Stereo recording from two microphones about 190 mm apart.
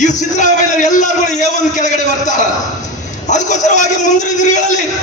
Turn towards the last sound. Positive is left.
turn(degrees=40)  # may be behind; listen again after turning